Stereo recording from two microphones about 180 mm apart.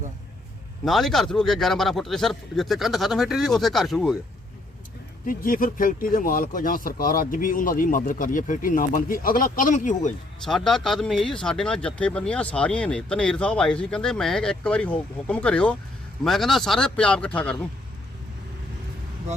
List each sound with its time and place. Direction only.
0.9 s speech: centre (ahead or behind)
5.2 s speech: 50° left (ahead or behind)
10.4 s speech: 5° left (ahead or behind)